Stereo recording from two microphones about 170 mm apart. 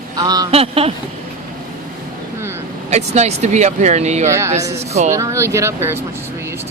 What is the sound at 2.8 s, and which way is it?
Speech, 40° right (ahead or behind).